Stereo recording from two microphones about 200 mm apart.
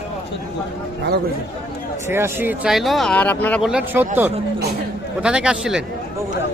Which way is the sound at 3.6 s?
5° right (ahead or behind).